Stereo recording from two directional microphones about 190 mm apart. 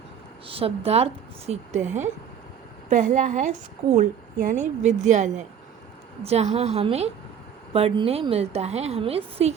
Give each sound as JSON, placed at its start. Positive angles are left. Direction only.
{"t": 0.4, "sound": "a woman's voice", "side_deg": -30}